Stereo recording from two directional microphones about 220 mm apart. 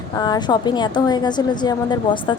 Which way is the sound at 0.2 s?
20° left (ahead or behind).